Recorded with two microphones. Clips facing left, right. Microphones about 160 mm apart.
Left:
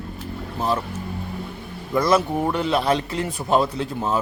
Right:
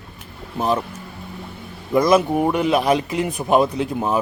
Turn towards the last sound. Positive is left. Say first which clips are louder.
# right 3 dB
turn(degrees=-15)  # may be behind; listen again after turning